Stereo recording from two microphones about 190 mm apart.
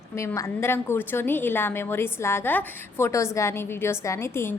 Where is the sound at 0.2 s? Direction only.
15° left (ahead or behind).